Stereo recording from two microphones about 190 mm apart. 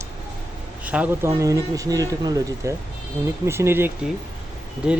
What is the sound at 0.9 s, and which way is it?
Speech, 10° right (ahead or behind).